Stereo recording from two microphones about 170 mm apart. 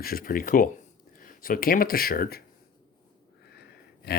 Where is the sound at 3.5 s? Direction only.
75° left (ahead or behind).